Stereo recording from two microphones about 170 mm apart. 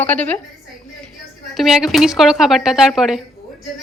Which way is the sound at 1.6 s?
Centre (ahead or behind).